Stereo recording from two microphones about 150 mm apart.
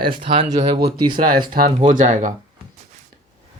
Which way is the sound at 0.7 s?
85° right.